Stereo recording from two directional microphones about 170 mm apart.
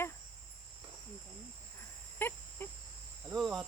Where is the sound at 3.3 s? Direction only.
Centre (ahead or behind).